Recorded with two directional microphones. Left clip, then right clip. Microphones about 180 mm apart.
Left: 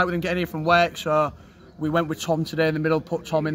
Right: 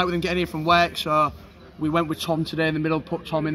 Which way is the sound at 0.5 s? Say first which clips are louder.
Even; 25° left (ahead or behind).